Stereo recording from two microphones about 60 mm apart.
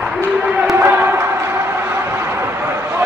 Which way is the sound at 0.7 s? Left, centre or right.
Right.